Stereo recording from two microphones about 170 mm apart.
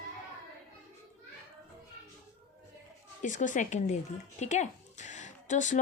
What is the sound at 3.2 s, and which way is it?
Speech, 50° left (ahead or behind).